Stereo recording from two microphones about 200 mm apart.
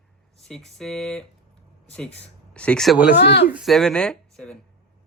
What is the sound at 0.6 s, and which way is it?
Speech, 5° left (ahead or behind).